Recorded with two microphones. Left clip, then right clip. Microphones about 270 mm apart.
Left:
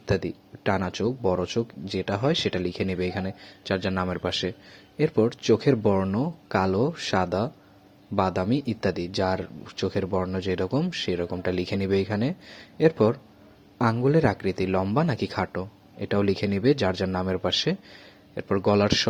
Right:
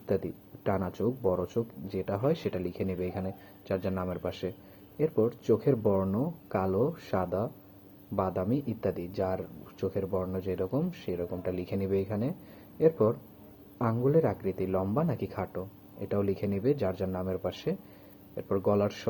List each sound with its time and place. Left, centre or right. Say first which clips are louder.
0.0 s speech: left 4 dB; left